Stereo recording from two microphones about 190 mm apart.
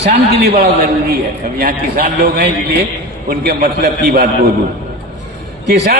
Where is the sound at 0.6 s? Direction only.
55° right (ahead or behind).